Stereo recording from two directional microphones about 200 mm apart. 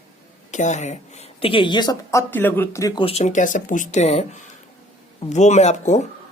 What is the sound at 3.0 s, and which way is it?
Speech, 35° left (ahead or behind).